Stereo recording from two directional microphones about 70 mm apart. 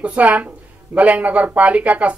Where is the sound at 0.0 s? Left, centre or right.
Centre.